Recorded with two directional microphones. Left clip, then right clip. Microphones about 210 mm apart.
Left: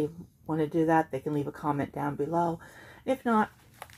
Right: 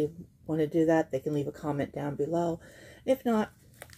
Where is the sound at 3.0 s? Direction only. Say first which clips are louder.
Left 1 dB; 5° left (ahead or behind).